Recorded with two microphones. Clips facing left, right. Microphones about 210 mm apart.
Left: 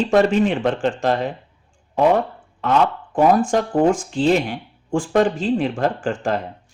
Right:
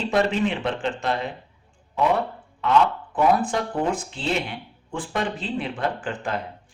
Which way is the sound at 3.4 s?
45° left (ahead or behind).